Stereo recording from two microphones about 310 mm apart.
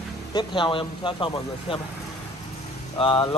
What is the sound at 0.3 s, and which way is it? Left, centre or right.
Speech, centre.